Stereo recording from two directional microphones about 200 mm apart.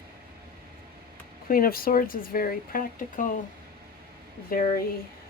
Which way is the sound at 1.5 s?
45° left (ahead or behind).